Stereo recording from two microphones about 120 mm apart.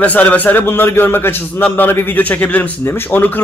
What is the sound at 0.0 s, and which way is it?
A man's voice, 15° left (ahead or behind).